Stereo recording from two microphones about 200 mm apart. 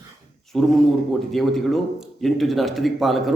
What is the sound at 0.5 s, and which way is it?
Speech, centre (ahead or behind).